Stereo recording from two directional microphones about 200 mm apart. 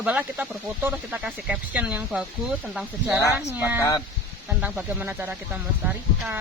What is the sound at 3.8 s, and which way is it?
Speech, 15° left (ahead or behind).